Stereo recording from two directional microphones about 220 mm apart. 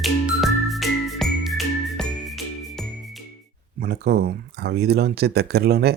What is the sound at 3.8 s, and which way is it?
Speech, 45° right (ahead or behind).